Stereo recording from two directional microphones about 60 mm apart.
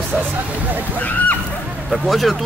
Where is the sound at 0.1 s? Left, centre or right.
Right.